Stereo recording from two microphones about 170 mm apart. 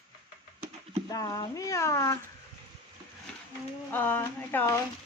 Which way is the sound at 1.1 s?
20° left (ahead or behind).